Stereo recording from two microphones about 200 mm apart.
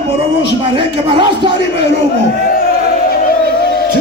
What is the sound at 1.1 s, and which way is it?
Speech, 25° right (ahead or behind).